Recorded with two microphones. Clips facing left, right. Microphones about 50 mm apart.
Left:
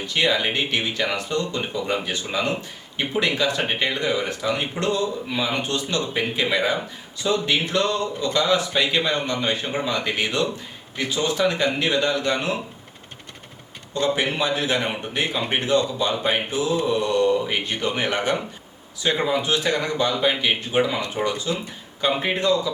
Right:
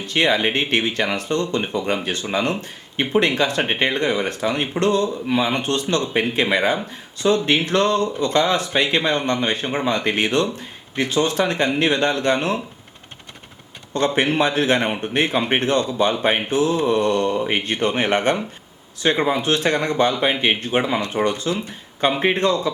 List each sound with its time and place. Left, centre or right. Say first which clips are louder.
0.0 s speech: right 3 dB; right
13.9 s speech: right 4 dB; right
19.0 s speech: right 4 dB; right
19.4 s speech: right 3 dB; right